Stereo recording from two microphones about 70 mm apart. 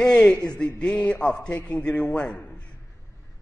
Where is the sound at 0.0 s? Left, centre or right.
Centre.